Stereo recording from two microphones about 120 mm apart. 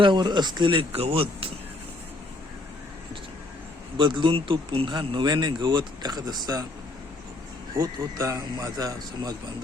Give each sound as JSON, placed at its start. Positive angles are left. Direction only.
{"t": 0.0, "sound": "speech", "side_deg": -40}
{"t": 3.9, "sound": "speech", "side_deg": -40}
{"t": 7.8, "sound": "a man's voice", "side_deg": -25}